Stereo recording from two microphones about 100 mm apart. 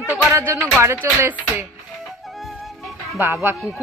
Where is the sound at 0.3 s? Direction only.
25° right (ahead or behind).